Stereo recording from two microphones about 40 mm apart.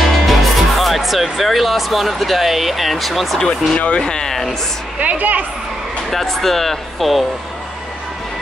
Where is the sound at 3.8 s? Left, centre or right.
Left.